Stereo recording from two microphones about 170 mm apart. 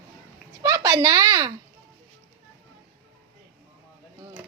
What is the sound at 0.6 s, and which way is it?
Speech, 20° right (ahead or behind).